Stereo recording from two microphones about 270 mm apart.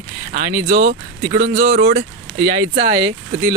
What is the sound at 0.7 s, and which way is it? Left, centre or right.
Speech, right.